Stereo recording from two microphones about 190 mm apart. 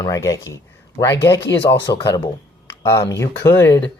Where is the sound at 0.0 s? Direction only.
15° left (ahead or behind).